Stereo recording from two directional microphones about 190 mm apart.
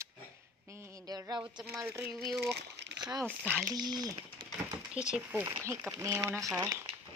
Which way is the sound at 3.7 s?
20° right (ahead or behind).